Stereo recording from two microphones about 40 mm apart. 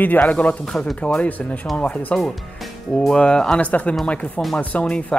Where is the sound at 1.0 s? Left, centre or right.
Left.